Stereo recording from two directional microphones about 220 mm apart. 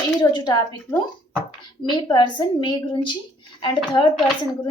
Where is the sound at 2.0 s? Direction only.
20° left (ahead or behind).